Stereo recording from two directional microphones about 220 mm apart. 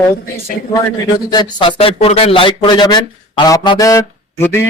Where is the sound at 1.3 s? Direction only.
25° left (ahead or behind).